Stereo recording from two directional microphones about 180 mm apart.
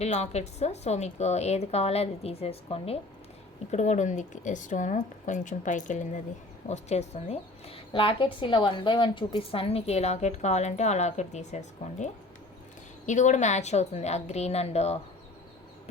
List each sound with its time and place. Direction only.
0.0 s a woman's voice: 35° left (ahead or behind)